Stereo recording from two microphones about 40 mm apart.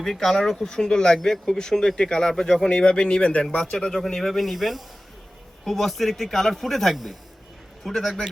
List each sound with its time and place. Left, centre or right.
0.0 s speech: centre
0.7 s a man's voice: centre
3.7 s a man's voice: centre